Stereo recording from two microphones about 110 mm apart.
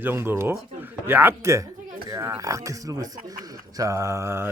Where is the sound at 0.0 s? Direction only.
20° right (ahead or behind).